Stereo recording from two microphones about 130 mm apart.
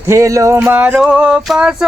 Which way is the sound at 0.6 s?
10° right (ahead or behind).